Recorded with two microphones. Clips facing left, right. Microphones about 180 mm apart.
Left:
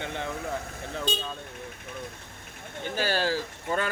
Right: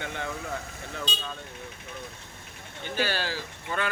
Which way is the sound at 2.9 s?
40° left (ahead or behind).